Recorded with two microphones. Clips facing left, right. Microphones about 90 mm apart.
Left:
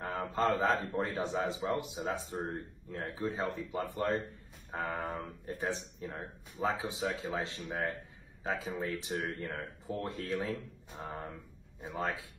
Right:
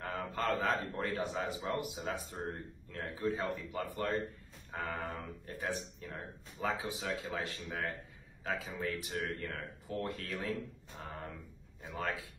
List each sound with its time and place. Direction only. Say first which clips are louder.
0.0 s a man's voice: left 4 dB; 25° left (ahead or behind)